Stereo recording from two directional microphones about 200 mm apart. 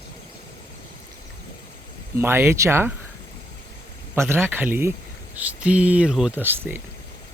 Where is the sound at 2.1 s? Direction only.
10° right (ahead or behind).